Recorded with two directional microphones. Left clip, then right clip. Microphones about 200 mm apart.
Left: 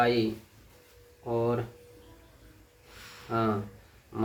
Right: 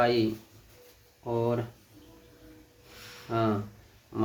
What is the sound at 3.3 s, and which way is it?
Speech, 20° right (ahead or behind).